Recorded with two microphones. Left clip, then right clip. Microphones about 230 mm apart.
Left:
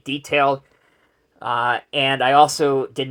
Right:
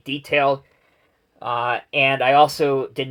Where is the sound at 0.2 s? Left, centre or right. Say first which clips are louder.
Even; left.